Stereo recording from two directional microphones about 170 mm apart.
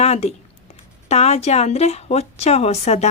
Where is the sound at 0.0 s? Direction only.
40° left (ahead or behind).